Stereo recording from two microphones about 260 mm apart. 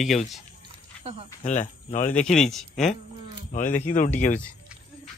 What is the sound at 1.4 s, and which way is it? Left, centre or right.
Speech, left.